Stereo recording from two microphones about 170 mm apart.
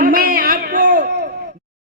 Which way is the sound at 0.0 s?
55° right (ahead or behind).